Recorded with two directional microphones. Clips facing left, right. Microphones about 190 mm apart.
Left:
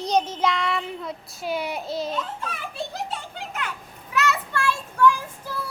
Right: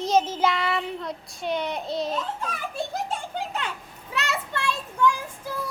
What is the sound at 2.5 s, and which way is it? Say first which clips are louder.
Children playing: right 2 dB; 45° right (ahead or behind).